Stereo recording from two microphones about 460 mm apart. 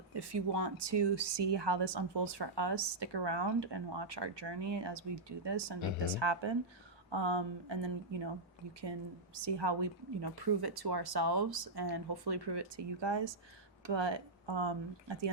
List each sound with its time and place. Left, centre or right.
0.1 s speech: right